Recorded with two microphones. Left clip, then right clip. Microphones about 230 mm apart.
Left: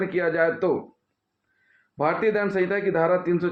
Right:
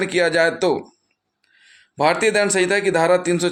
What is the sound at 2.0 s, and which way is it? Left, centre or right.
Speech, right.